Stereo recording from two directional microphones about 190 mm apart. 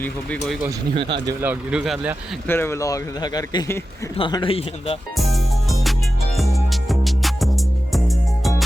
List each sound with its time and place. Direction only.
0.0 s speech: 5° left (ahead or behind)
0.9 s speech: 25° right (ahead or behind)
1.4 s speech: 10° right (ahead or behind)
2.5 s speech: 10° left (ahead or behind); by 4.9 s 30° left (ahead or behind)
5.1 s music: centre (ahead or behind)